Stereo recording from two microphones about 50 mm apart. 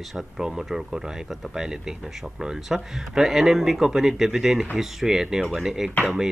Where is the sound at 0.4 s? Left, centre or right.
Centre.